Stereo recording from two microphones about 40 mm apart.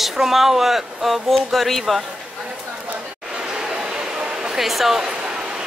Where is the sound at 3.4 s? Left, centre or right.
Centre.